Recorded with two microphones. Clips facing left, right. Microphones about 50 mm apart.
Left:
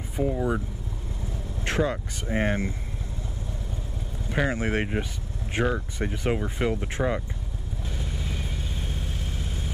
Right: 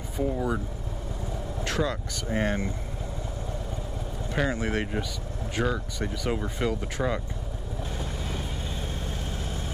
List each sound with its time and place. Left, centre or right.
0.2 s speech: centre
1.6 s speech: left
4.5 s speech: left